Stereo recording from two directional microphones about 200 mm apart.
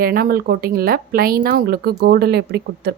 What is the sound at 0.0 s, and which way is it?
Speech, 45° right (ahead or behind).